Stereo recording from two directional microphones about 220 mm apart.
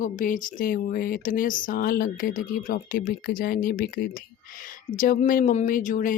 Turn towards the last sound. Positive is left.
turn(degrees=40)  # may be behind; listen again after turning